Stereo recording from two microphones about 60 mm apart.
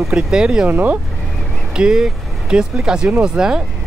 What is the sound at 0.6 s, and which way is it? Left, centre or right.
Speech, right.